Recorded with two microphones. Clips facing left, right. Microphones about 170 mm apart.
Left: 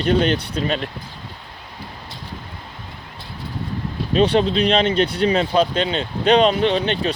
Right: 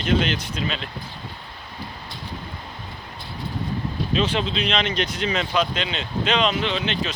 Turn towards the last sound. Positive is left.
turn(degrees=40)  # may be behind; listen again after turning